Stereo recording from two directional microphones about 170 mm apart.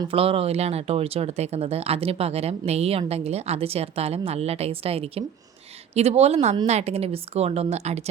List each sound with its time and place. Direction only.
0.0 s speech: 35° right (ahead or behind)